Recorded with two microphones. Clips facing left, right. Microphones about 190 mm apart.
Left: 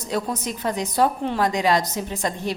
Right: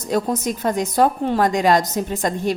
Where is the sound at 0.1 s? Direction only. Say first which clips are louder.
Right 5 dB; 45° right (ahead or behind).